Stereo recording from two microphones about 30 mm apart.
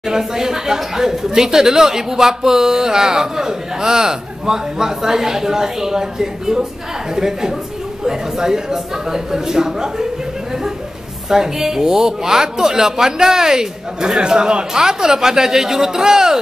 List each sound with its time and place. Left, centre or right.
0.1 s speech: centre
11.2 s speech: centre